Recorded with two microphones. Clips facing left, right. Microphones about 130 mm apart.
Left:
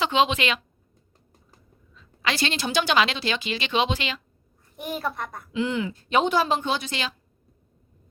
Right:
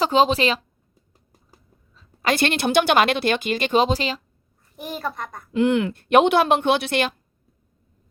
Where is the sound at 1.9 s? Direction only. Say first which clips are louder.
Right 6 dB; 45° right (ahead or behind).